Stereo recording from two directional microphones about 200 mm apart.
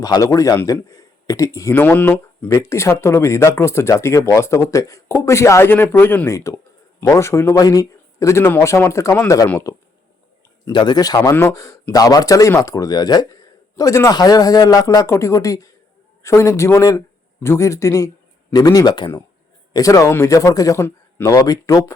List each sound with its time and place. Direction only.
0.0 s speech: 15° left (ahead or behind)